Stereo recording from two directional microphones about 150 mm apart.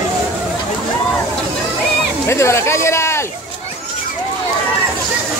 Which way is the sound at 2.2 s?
20° left (ahead or behind).